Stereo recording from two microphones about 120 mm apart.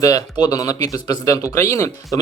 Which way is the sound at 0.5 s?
30° left (ahead or behind).